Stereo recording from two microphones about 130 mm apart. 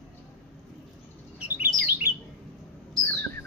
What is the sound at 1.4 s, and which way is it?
Bird, 10° right (ahead or behind).